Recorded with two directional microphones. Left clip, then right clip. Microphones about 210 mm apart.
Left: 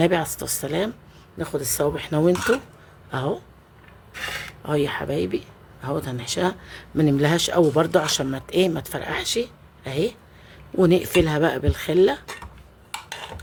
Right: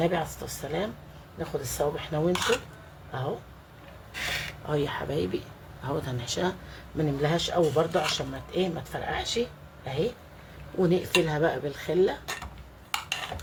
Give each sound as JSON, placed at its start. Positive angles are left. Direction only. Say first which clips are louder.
{"t": 0.0, "sound": "speech", "louder": "left 6 dB", "side_deg": 50}
{"t": 4.6, "sound": "speech", "louder": "left 8 dB", "side_deg": 40}
{"t": 12.9, "sound": "a sound", "louder": "right 2 dB", "side_deg": -5}